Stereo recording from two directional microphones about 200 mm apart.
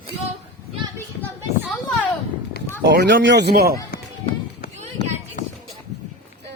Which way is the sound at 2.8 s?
60° right (ahead or behind).